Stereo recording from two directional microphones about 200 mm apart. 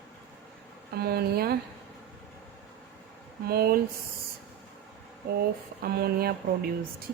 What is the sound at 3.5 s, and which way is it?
Speech, 50° right (ahead or behind).